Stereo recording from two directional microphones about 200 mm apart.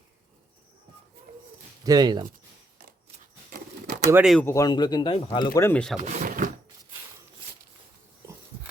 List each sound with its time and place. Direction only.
1.3 s a sound: 50° right (ahead or behind)
1.8 s speech: 20° right (ahead or behind)
4.1 s speech: 5° right (ahead or behind)
4.4 s speech: 15° left (ahead or behind)
5.5 s speech: 10° left (ahead or behind)
6.0 s speech: 40° right (ahead or behind)